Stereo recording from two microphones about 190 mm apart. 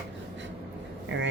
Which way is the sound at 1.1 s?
75° right (ahead or behind).